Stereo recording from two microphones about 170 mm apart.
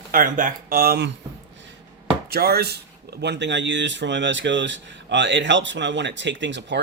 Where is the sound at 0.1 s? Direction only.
50° right (ahead or behind); by 1.1 s 70° right (ahead or behind).